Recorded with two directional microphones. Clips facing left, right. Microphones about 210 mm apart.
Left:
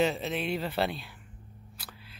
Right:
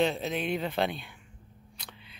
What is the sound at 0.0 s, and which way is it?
Speech, 5° left (ahead or behind).